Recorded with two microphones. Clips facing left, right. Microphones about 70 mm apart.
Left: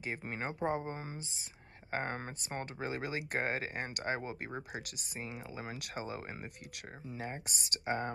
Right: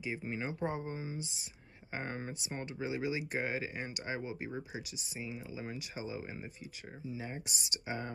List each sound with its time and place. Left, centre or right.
0.0 s speech: left
0.7 s speech: left